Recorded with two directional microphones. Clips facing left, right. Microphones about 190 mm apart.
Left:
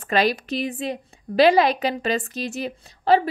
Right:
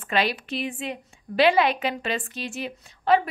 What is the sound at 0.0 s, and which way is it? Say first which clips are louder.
A woman's voice: left 4 dB; 40° left (ahead or behind).